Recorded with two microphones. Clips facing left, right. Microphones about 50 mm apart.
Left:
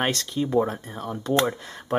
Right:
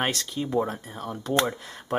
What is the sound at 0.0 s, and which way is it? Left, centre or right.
Speech, centre.